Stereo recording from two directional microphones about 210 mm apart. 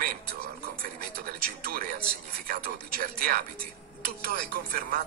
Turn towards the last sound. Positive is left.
turn(degrees=-45)  # may be behind; listen again after turning